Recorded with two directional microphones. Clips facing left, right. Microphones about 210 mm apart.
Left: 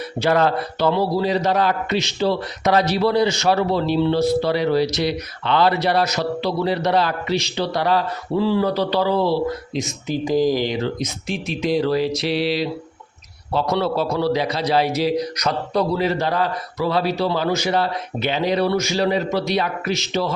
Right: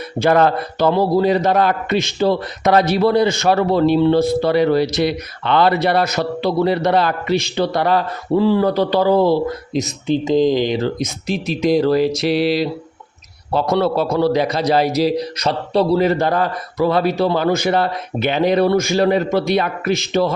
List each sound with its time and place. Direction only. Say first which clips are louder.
0.2 s a man's voice: right 4 dB; 50° right (ahead or behind)
10.1 s speech: right 4 dB; 20° right (ahead or behind)
10.8 s a man's voice: right 3 dB; 40° right (ahead or behind)
16.0 s a man's voice: right 4 dB; 50° right (ahead or behind)